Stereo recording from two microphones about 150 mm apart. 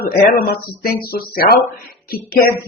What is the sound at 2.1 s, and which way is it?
Speech, 75° left (ahead or behind).